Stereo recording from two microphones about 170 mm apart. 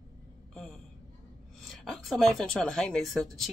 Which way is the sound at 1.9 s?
Centre (ahead or behind).